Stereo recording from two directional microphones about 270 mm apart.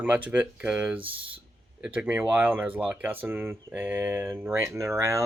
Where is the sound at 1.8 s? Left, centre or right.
Centre.